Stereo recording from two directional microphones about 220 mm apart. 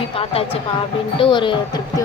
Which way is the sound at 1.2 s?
20° left (ahead or behind).